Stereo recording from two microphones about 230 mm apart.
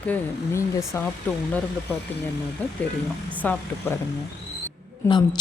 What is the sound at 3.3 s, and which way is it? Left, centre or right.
Speech, centre.